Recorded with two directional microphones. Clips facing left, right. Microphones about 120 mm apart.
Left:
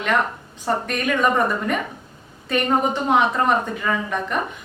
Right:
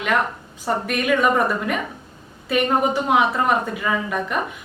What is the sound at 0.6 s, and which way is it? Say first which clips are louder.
A woman's voice: even; 5° right (ahead or behind).